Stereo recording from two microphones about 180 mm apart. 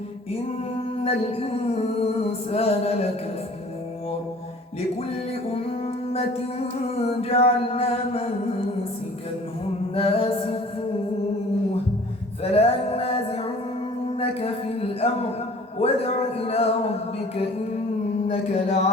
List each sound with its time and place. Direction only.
1.0 s music: 35° left (ahead or behind)
5.3 s music: 35° left (ahead or behind)
6.8 s music: 35° left (ahead or behind)
9.9 s music: 30° left (ahead or behind)
12.4 s music: 35° left (ahead or behind)
14.2 s speech: 35° left (ahead or behind)
15.8 s music: 35° left (ahead or behind)